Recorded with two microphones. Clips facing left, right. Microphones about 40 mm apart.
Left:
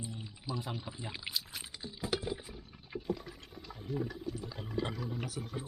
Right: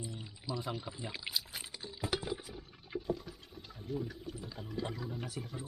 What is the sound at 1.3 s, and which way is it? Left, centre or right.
Pour, centre.